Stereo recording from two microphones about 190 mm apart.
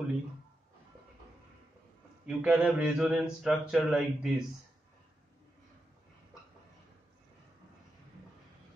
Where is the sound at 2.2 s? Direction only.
5° right (ahead or behind).